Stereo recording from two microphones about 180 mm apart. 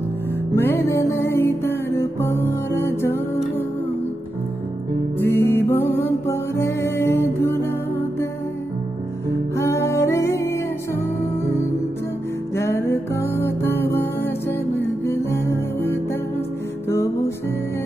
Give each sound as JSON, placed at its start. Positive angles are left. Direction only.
{"t": 0.6, "sound": "music", "side_deg": 15}
{"t": 5.2, "sound": "music", "side_deg": 15}
{"t": 9.6, "sound": "music", "side_deg": 15}
{"t": 12.5, "sound": "music", "side_deg": 15}